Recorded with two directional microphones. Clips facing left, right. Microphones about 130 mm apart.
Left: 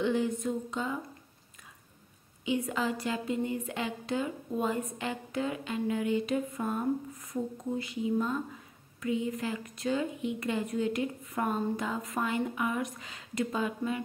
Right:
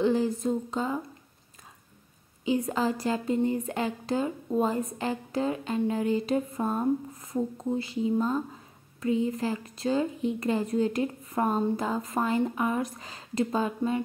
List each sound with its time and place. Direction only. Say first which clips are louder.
0.0 s speech: right 4 dB; 35° right (ahead or behind)
2.4 s speech: right 4 dB; 35° right (ahead or behind)